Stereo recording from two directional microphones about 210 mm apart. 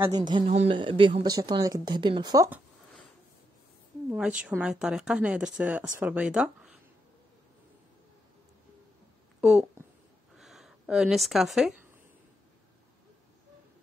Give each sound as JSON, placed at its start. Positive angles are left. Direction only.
{"t": 0.0, "sound": "speech", "side_deg": -20}
{"t": 0.5, "sound": "speech", "side_deg": -30}
{"t": 4.1, "sound": "a woman's voice", "side_deg": -5}
{"t": 9.4, "sound": "speech", "side_deg": -5}
{"t": 10.3, "sound": "a sound", "side_deg": 0}